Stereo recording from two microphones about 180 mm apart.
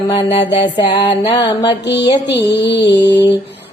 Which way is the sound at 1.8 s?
70° left (ahead or behind).